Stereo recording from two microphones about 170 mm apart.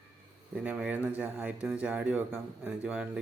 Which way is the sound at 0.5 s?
5° right (ahead or behind).